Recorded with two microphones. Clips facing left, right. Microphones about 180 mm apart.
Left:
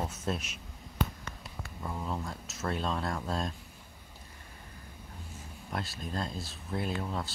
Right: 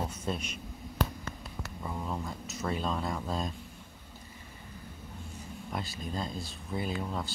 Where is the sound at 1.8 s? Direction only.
Centre (ahead or behind).